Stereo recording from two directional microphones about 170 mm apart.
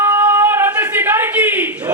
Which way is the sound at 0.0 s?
10° right (ahead or behind).